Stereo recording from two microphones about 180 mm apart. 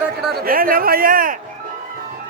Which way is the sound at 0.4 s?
55° right (ahead or behind).